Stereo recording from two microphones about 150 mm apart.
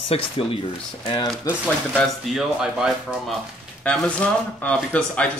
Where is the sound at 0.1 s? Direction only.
40° left (ahead or behind).